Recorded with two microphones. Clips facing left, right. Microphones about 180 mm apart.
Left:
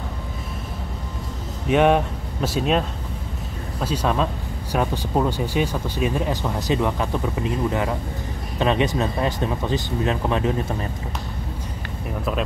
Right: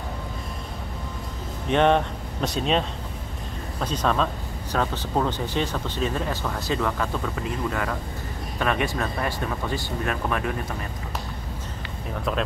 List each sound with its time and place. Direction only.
1.7 s speech: 10° left (ahead or behind)
3.8 s speech: 10° left (ahead or behind)